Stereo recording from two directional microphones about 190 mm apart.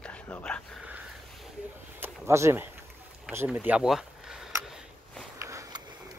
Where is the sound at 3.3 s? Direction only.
10° right (ahead or behind).